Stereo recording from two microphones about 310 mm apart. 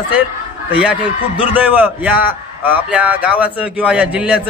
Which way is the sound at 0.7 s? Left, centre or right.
Centre.